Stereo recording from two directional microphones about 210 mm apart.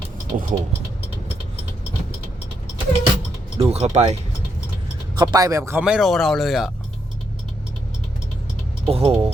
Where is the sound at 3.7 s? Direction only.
30° right (ahead or behind).